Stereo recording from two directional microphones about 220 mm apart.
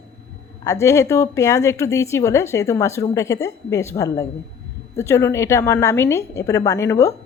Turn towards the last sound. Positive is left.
turn(degrees=15)  # may be behind; listen again after turning